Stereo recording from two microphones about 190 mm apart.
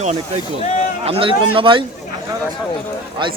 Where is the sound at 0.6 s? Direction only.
35° left (ahead or behind).